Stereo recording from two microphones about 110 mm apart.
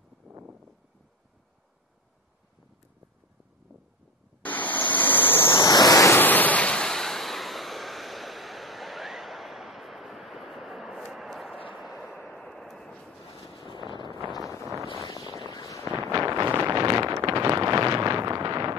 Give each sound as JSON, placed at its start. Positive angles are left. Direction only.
{"t": 0.3, "sound": "a sound", "side_deg": -15}
{"t": 4.4, "sound": "vehicle", "side_deg": 15}
{"t": 5.7, "sound": "waves", "side_deg": 35}
{"t": 6.1, "sound": "waves", "side_deg": 15}
{"t": 11.1, "sound": "a sound", "side_deg": 0}
{"t": 12.3, "sound": "vehicle", "side_deg": 0}
{"t": 13.3, "sound": "boat", "side_deg": 60}
{"t": 14.0, "sound": "vehicle", "side_deg": -50}
{"t": 15.0, "sound": "boat", "side_deg": 40}
{"t": 16.0, "sound": "wind noise", "side_deg": -25}
{"t": 16.8, "sound": "vehicle", "side_deg": -30}
{"t": 17.2, "sound": "wind noise", "side_deg": -30}